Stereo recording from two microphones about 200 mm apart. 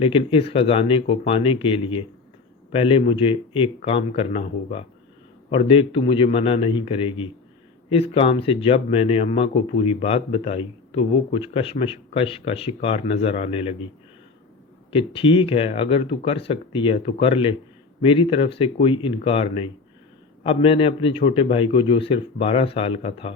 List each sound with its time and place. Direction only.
0.0 s speech: 25° left (ahead or behind)
14.8 s speech: 25° left (ahead or behind)